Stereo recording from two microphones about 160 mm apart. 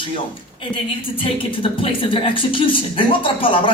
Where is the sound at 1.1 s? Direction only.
35° left (ahead or behind).